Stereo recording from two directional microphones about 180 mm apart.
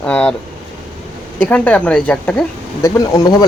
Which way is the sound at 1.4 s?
10° left (ahead or behind).